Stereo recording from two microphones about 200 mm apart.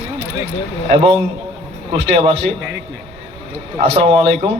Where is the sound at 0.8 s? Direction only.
30° right (ahead or behind).